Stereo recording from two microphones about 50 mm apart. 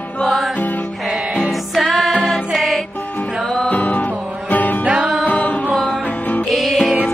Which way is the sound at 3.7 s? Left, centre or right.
Left.